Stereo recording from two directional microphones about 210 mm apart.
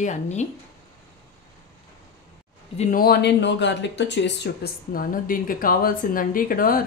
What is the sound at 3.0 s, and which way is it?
Speech, 50° left (ahead or behind).